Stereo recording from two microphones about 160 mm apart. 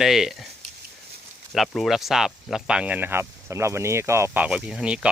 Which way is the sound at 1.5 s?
Centre (ahead or behind).